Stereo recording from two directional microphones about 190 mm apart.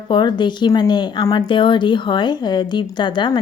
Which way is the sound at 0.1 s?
25° left (ahead or behind).